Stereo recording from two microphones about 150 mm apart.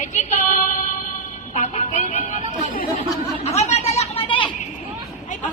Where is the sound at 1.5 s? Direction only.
50° left (ahead or behind).